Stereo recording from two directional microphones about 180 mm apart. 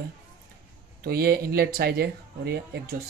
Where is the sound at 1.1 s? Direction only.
60° right (ahead or behind).